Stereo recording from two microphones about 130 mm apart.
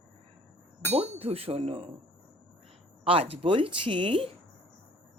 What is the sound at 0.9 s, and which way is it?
Speech, 50° right (ahead or behind).